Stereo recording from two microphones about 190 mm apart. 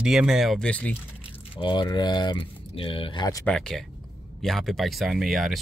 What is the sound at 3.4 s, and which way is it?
Speech, 5° left (ahead or behind).